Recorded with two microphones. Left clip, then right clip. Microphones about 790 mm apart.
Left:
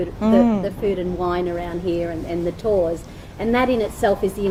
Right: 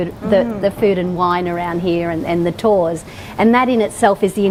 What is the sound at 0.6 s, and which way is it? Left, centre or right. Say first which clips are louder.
Speech: right 7 dB; right.